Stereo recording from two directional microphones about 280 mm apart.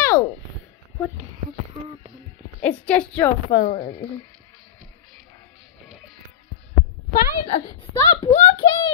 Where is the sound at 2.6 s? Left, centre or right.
Centre.